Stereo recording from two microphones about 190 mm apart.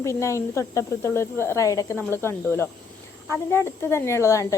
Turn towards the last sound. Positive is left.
turn(degrees=15)  # may be behind; listen again after turning